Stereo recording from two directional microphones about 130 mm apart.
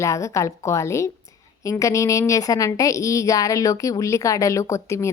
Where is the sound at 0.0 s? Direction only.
25° left (ahead or behind).